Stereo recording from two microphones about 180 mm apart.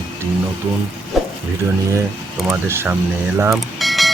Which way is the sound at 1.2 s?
Centre (ahead or behind).